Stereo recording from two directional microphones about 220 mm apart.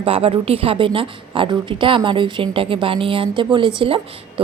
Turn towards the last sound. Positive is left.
turn(degrees=-25)  # may be behind; listen again after turning